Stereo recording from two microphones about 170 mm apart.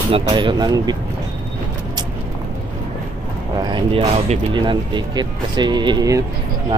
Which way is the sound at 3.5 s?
30° right (ahead or behind).